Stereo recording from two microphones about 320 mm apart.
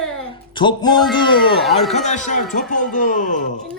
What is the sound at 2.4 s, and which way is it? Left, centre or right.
Speech, centre.